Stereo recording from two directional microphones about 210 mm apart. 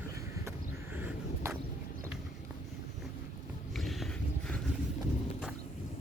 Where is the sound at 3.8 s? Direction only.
Centre (ahead or behind).